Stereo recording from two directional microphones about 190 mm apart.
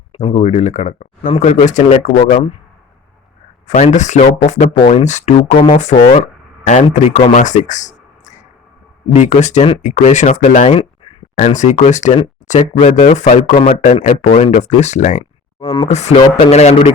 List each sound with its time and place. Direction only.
0.1 s speech: 30° left (ahead or behind)
3.7 s speech: 40° left (ahead or behind)
9.1 s speech: 40° left (ahead or behind)
15.6 s speech: 25° left (ahead or behind)
15.9 s speech: 35° left (ahead or behind)